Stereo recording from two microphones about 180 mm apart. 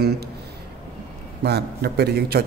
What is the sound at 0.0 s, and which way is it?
Speech, 65° right (ahead or behind).